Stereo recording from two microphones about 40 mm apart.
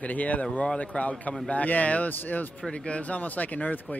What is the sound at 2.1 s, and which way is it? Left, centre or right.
Speech, left.